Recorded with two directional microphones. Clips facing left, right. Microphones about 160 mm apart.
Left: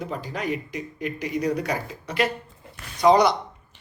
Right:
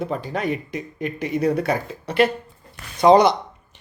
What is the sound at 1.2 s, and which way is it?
Speech, 25° right (ahead or behind).